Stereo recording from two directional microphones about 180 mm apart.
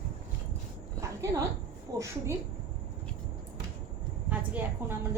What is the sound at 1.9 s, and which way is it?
Speech, 20° right (ahead or behind).